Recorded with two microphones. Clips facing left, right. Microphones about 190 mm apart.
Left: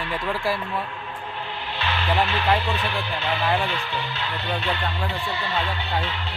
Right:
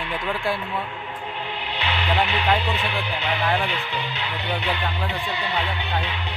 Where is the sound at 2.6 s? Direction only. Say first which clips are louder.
Even; 15° right (ahead or behind).